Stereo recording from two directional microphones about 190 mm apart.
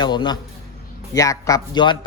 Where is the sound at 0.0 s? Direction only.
25° left (ahead or behind).